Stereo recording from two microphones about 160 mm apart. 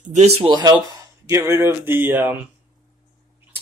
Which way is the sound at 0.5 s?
25° right (ahead or behind).